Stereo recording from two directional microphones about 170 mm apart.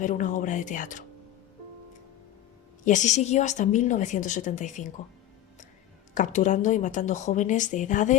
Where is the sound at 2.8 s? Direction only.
45° left (ahead or behind).